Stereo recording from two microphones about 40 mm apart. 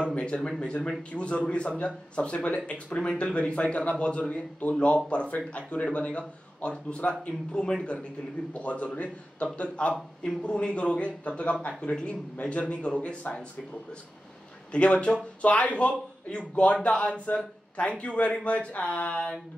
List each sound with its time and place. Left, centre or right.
0.1 s speech: left
14.7 s speech: left